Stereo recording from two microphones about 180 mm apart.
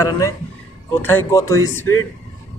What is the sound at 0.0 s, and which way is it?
Speech, 15° left (ahead or behind).